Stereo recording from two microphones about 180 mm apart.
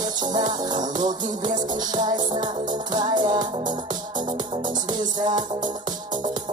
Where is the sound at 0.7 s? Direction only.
25° right (ahead or behind).